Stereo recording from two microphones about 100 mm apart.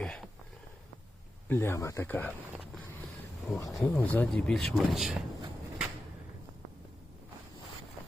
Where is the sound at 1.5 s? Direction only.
25° left (ahead or behind).